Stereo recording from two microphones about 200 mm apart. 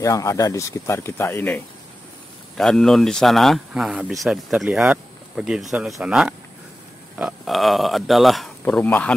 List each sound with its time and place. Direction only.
0.0 s speech: 15° left (ahead or behind)